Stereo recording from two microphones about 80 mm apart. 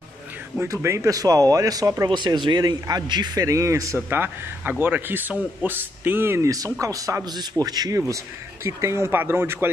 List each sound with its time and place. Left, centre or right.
0.6 s speech: right
2.0 s speech: right
3.4 s speech: right
4.1 s speech: right
6.4 s speech: right
7.2 s speech: right
8.6 s speech: right